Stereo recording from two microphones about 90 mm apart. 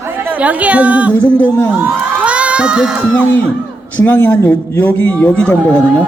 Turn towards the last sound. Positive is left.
turn(degrees=15)  # may be behind; listen again after turning